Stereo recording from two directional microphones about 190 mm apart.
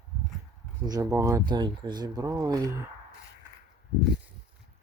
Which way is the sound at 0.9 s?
20° right (ahead or behind).